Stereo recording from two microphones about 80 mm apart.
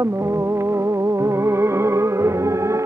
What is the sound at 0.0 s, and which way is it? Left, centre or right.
Music, right.